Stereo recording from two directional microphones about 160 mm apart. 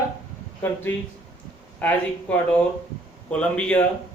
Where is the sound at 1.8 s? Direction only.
10° left (ahead or behind).